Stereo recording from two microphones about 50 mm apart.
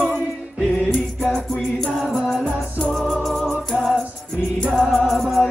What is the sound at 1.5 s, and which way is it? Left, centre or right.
Music, centre.